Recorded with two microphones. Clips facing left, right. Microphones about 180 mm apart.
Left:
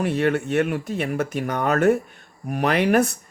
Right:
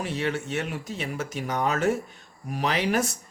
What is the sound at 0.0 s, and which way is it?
Speech, 55° left (ahead or behind).